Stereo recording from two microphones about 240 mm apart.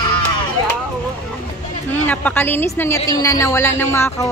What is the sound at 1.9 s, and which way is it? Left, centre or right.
Speech, centre.